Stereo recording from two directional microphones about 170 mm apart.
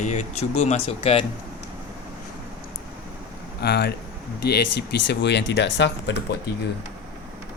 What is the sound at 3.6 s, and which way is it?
Speech, 75° left (ahead or behind).